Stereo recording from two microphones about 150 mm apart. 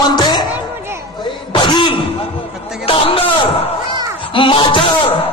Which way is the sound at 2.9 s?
40° left (ahead or behind).